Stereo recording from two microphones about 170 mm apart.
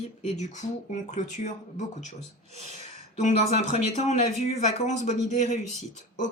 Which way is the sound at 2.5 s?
40° right (ahead or behind).